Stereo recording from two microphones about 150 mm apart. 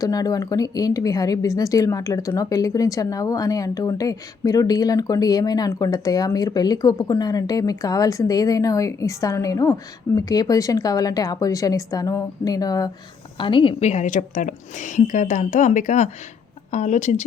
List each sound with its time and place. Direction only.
0.0 s a woman's voice: 25° left (ahead or behind); by 17.2 s 50° left (ahead or behind)